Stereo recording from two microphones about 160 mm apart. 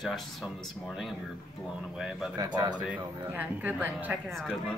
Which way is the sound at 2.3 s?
25° right (ahead or behind).